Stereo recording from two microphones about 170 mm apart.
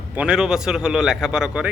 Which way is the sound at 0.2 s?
5° right (ahead or behind).